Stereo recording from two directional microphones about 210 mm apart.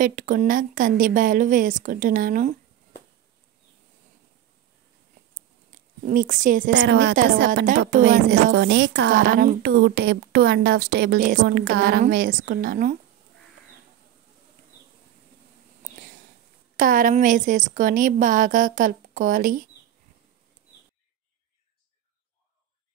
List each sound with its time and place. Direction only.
0.0 s a woman's voice: 40° right (ahead or behind)
6.0 s a woman's voice: 40° right (ahead or behind)
6.7 s a woman's voice: 60° right (ahead or behind); by 9.6 s 40° right (ahead or behind)
9.6 s a woman's voice: 50° right (ahead or behind)
16.7 s a woman's voice: 40° right (ahead or behind)